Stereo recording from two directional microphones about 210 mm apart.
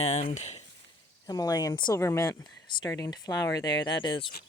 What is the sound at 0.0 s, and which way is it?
Speech, 30° left (ahead or behind).